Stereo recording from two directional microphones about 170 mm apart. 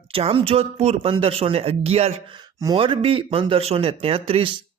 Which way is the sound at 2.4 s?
25° right (ahead or behind).